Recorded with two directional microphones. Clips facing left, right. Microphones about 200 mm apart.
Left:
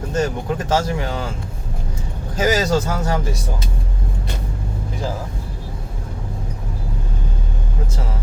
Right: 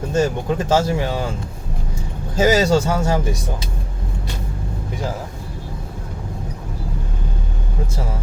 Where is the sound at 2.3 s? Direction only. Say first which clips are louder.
Right 3 dB; 30° right (ahead or behind).